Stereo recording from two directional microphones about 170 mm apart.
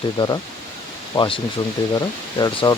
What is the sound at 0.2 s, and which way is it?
Speech, 30° left (ahead or behind).